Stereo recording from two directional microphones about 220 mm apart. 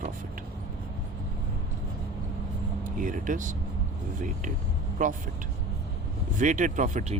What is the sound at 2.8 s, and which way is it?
Speech, 35° right (ahead or behind).